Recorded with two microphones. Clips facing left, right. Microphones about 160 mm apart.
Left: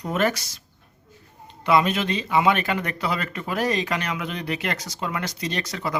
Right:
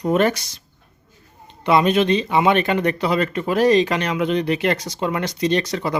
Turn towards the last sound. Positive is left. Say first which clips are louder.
# right 8 dB
turn(degrees=-25)  # may be behind; listen again after turning